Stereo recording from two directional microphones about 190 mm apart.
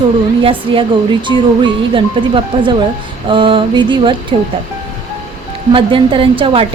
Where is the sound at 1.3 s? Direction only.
20° left (ahead or behind).